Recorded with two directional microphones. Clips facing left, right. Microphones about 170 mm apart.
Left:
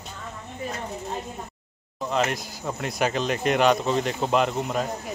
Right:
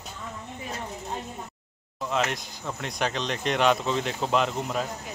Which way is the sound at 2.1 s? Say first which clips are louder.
Left 3 dB; 5° left (ahead or behind).